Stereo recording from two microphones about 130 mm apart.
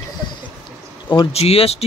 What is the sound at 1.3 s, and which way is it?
Speech, 50° left (ahead or behind).